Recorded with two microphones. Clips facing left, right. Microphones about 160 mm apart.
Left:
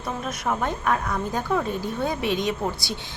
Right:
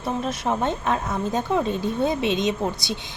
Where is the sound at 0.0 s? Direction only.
30° right (ahead or behind).